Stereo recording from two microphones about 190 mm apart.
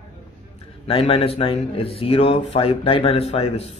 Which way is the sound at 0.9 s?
30° left (ahead or behind).